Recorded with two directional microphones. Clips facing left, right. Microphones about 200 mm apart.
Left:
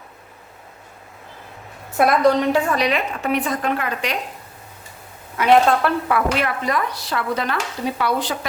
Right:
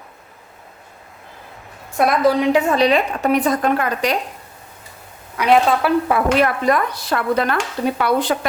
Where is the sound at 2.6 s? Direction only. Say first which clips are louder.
Right 4 dB; 25° right (ahead or behind); by 4.1 s 40° right (ahead or behind).